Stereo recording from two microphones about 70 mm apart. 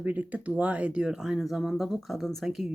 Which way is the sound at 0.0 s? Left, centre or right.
Right.